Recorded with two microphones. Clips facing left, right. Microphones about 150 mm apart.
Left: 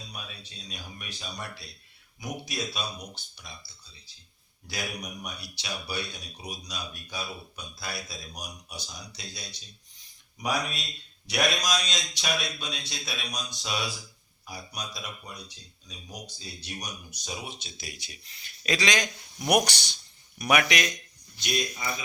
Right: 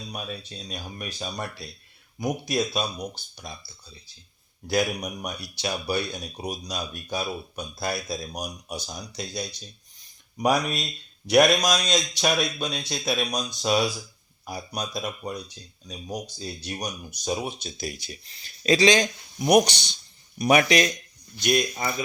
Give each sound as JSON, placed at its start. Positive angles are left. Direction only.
{"t": 0.1, "sound": "speech", "side_deg": -45}
{"t": 4.6, "sound": "speech", "side_deg": -45}
{"t": 19.4, "sound": "speech", "side_deg": -20}
{"t": 21.3, "sound": "speech", "side_deg": -50}